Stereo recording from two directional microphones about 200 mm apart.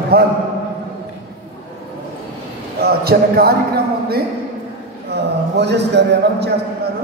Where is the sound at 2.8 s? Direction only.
50° right (ahead or behind).